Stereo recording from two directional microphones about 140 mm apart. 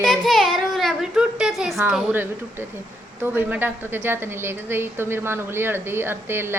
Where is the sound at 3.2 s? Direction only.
15° right (ahead or behind).